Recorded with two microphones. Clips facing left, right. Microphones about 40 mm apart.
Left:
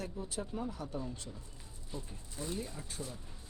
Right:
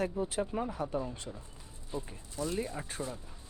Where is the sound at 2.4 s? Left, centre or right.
Centre.